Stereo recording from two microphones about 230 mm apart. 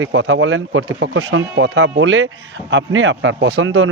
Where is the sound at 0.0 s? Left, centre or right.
Right.